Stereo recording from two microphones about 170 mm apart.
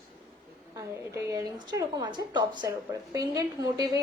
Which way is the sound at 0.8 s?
20° right (ahead or behind).